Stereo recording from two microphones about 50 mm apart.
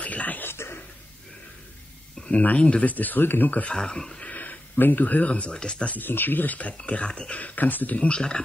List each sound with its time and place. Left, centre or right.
0.0 s a sound: left
0.4 s a sound: left
2.4 s speech: left
2.9 s speech: left
3.6 s speech: centre
4.3 s a sound: left
5.5 s speech: centre
5.9 s speech: left
6.8 s speech: left
7.3 s speech: left